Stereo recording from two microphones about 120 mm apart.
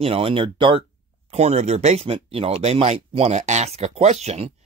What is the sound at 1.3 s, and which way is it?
Speech, 65° right (ahead or behind).